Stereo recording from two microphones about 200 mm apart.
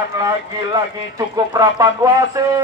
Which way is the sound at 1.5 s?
20° right (ahead or behind).